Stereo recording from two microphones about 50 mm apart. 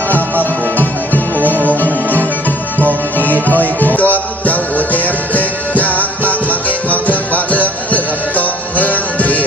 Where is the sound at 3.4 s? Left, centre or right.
Left.